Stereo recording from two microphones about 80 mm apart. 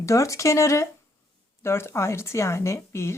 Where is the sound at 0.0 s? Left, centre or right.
Left.